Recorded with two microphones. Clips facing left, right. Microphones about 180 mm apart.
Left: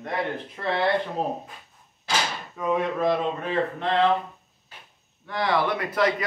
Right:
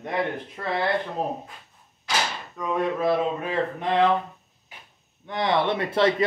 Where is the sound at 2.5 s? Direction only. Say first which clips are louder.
Left 1 dB; 5° left (ahead or behind); by 4.0 s 15° right (ahead or behind).